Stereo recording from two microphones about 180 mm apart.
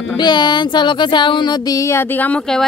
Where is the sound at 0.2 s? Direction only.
25° left (ahead or behind).